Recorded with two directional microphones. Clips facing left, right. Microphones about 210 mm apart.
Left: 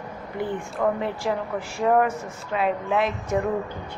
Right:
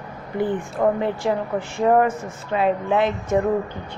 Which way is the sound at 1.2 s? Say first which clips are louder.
Right 4 dB; centre (ahead or behind).